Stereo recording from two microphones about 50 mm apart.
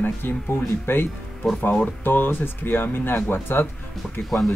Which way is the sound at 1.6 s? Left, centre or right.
Left.